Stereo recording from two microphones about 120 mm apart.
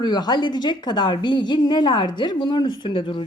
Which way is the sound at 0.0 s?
35° left (ahead or behind).